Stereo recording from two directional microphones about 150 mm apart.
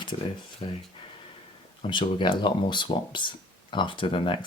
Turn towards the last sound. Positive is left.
turn(degrees=35)  # may be behind; listen again after turning